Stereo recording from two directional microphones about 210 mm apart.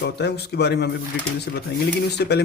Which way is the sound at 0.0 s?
50° left (ahead or behind).